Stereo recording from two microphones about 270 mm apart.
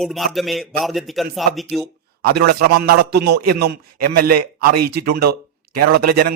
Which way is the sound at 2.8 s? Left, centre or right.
Right.